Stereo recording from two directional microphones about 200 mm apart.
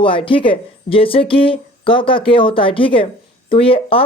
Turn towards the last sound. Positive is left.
turn(degrees=30)  # may be behind; listen again after turning